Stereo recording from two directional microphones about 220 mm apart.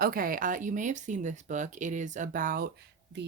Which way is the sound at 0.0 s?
40° right (ahead or behind).